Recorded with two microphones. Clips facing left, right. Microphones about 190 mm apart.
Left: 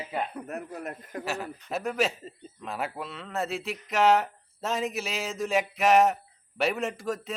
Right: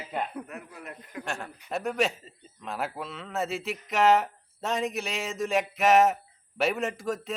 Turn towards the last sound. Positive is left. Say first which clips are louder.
# even
turn(degrees=0)  # may be behind; listen again after turning